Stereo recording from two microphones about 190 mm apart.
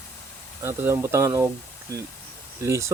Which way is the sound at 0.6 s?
15° right (ahead or behind).